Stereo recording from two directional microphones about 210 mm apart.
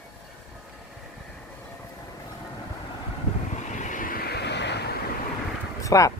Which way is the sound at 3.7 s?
35° left (ahead or behind).